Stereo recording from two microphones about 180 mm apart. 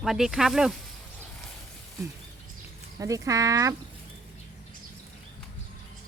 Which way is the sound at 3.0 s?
20° right (ahead or behind).